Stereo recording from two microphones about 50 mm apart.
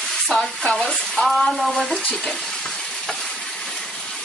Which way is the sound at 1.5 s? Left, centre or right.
Centre.